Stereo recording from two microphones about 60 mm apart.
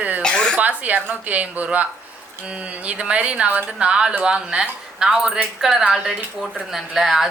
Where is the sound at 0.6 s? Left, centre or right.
Right.